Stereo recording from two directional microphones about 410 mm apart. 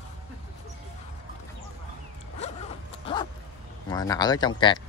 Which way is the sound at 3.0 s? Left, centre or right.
Centre.